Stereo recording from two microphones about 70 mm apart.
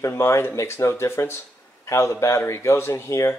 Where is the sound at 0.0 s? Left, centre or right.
Left.